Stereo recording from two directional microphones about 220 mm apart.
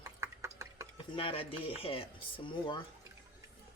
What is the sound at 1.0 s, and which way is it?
Speech, 25° left (ahead or behind).